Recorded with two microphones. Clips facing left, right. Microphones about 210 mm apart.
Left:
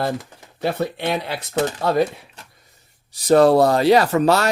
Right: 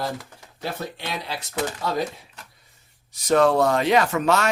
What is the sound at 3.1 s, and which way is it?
Speech, 35° left (ahead or behind).